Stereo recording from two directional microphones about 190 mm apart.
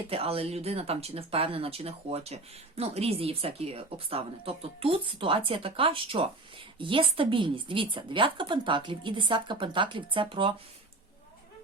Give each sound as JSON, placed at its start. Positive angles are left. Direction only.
{"t": 0.1, "sound": "speech", "side_deg": -30}